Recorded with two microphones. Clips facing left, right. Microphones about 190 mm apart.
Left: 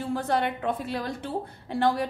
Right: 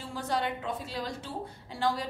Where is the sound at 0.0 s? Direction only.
55° left (ahead or behind).